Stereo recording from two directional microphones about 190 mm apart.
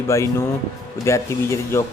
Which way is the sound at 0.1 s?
15° left (ahead or behind).